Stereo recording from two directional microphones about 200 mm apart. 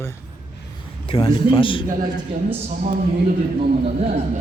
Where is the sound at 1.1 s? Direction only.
25° left (ahead or behind).